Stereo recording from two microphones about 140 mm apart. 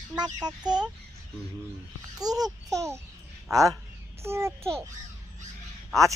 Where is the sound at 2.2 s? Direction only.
30° right (ahead or behind).